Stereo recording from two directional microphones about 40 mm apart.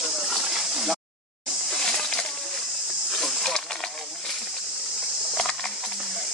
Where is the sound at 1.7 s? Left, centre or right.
Centre.